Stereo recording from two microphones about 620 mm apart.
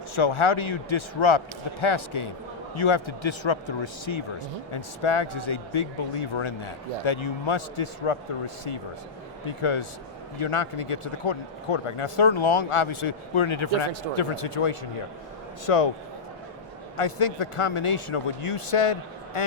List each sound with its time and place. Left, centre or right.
0.2 s speech: left
17.0 s speech: left